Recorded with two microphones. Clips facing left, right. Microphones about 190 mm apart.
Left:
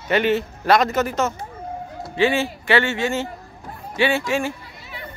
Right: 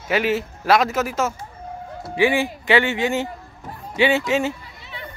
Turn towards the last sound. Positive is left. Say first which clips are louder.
# right 2 dB
turn(degrees=-20)  # may be behind; listen again after turning